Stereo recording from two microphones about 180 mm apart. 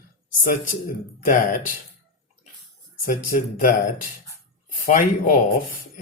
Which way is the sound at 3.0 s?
50° left (ahead or behind).